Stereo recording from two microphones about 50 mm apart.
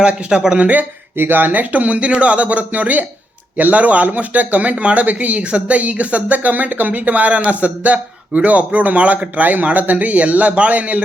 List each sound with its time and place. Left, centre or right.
0.3 s speech: centre
1.2 s a man's voice: right